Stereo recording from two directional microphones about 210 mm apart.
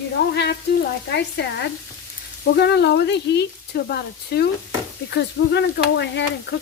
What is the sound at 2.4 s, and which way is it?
Speech, 55° left (ahead or behind).